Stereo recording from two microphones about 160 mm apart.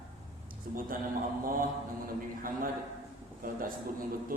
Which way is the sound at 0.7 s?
60° right (ahead or behind).